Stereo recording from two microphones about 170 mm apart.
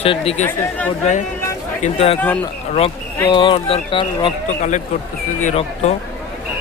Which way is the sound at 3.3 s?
30° left (ahead or behind).